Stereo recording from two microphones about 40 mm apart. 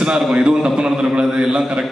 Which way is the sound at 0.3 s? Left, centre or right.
Centre.